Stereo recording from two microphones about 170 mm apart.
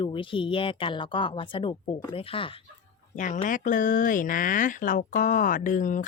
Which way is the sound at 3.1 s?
45° left (ahead or behind).